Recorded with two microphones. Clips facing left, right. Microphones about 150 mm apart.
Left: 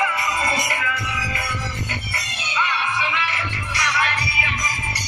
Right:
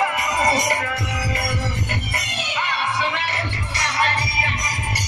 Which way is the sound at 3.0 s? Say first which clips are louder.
Right 1 dB; 45° right (ahead or behind).